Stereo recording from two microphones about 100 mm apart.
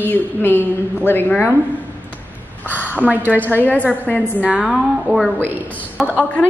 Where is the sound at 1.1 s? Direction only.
20° left (ahead or behind).